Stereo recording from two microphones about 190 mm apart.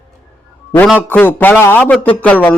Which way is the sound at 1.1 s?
10° left (ahead or behind).